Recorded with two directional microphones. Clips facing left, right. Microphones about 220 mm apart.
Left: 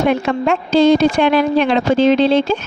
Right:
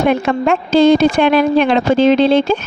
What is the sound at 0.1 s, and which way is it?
A woman's voice, 55° right (ahead or behind).